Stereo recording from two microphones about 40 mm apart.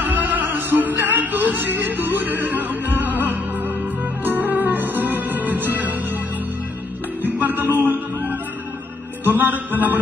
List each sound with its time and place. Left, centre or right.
0.0 s music: right
7.2 s music: right